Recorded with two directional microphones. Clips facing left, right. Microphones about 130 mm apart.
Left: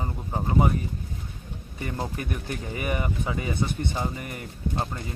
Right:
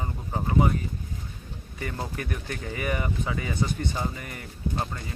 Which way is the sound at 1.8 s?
20° left (ahead or behind).